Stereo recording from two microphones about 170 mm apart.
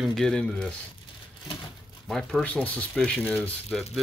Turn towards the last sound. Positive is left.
turn(degrees=5)  # may be behind; listen again after turning